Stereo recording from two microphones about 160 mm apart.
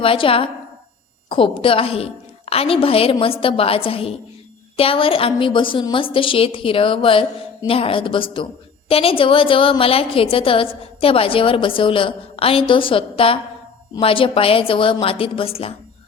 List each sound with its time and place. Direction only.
0.0 s a woman's voice: 35° left (ahead or behind)